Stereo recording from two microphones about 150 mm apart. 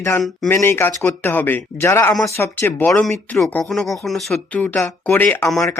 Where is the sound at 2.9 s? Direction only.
5° left (ahead or behind).